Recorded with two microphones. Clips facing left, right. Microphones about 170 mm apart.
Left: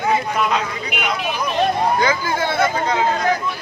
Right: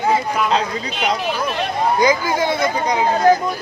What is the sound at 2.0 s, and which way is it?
Speech, 15° right (ahead or behind).